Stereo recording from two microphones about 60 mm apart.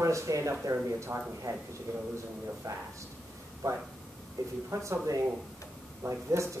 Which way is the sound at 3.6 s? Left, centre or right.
Right.